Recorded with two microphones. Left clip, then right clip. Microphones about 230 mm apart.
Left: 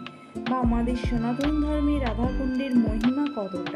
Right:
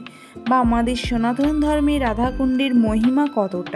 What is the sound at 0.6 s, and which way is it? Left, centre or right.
Speech, right.